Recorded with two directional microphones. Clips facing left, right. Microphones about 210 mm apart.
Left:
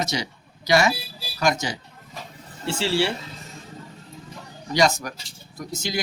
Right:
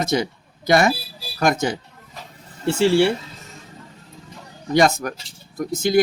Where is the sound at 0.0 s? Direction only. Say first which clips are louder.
Right 6 dB; 55° right (ahead or behind).